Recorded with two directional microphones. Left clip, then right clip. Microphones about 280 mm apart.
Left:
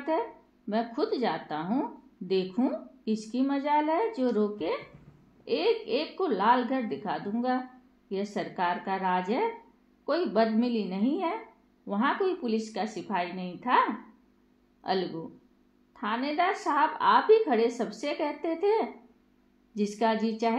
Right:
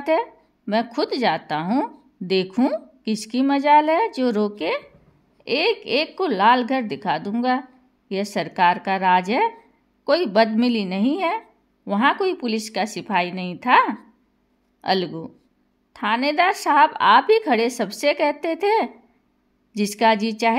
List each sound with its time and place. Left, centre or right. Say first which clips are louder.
0.1 s a woman's voice: right 8 dB; right